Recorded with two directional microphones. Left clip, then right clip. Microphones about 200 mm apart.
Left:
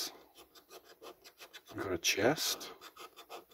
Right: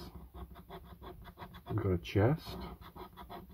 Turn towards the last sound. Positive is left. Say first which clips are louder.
# right 1 dB
turn(degrees=-5)  # may be behind; listen again after turning